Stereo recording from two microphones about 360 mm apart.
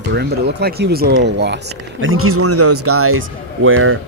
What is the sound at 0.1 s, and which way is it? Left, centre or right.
Speech, right.